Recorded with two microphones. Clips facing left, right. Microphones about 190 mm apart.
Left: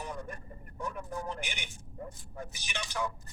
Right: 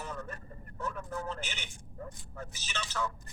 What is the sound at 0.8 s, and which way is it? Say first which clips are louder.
A man's voice: even; 15° left (ahead or behind).